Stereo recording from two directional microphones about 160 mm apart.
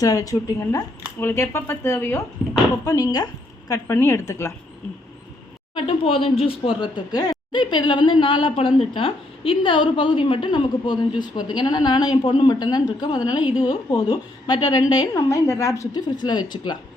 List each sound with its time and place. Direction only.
0.0 s a woman's voice: 20° left (ahead or behind)
5.7 s speech: 35° left (ahead or behind)